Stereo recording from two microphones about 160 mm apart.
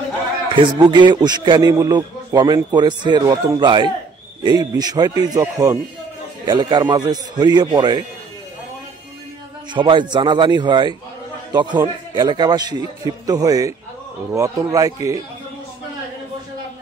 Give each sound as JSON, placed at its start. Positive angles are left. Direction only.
{"t": 0.6, "sound": "a man's voice", "side_deg": -30}
{"t": 9.8, "sound": "a man's voice", "side_deg": -30}